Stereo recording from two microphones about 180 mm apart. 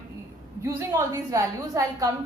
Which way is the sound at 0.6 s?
15° right (ahead or behind).